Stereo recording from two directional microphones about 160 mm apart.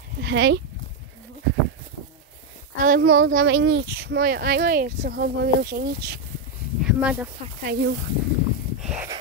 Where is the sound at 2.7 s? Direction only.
60° right (ahead or behind); by 6.2 s 75° right (ahead or behind).